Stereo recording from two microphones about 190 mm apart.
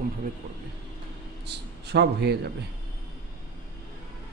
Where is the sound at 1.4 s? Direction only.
60° right (ahead or behind).